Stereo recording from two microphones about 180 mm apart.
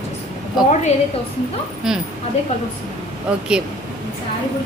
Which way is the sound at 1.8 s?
5° right (ahead or behind).